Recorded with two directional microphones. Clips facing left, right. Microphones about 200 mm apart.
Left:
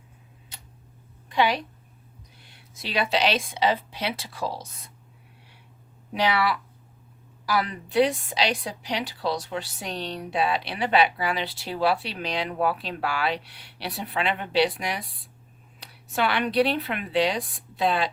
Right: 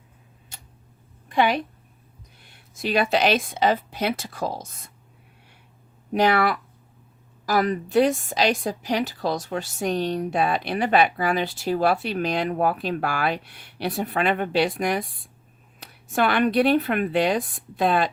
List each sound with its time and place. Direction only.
1.3 s a woman's voice: 50° right (ahead or behind)
2.7 s a woman's voice: 50° right (ahead or behind)
6.1 s a woman's voice: 50° right (ahead or behind)